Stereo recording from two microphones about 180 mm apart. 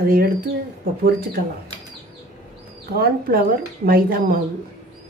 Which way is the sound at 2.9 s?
55° right (ahead or behind).